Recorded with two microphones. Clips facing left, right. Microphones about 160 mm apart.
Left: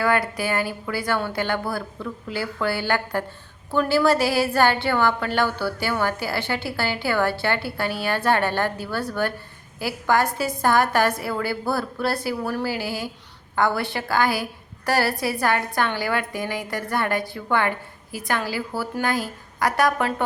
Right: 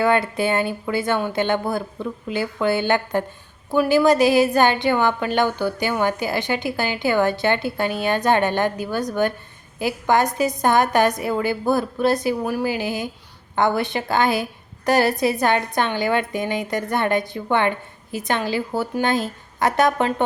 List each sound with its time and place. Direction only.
0.0 s a woman's voice: 25° right (ahead or behind)